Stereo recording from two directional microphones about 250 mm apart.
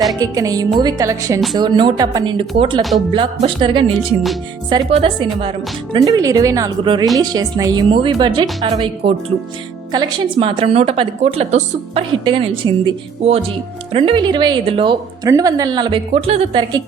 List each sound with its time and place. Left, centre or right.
0.2 s a woman's voice: centre